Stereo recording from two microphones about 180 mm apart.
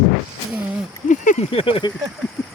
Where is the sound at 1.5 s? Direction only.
30° left (ahead or behind).